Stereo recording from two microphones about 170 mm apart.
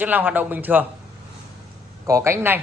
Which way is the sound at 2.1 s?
15° right (ahead or behind).